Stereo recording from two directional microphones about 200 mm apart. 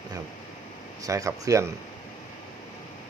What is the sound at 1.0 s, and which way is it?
Speech, 15° right (ahead or behind).